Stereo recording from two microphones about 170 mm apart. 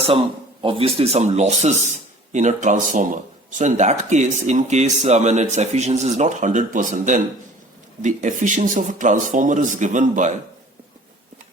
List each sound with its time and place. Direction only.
0.6 s speech: 35° right (ahead or behind)